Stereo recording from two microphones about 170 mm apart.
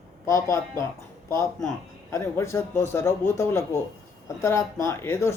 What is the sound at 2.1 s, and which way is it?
Speech, 15° left (ahead or behind).